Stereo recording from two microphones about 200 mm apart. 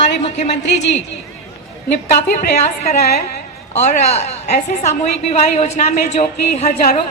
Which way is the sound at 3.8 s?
35° left (ahead or behind).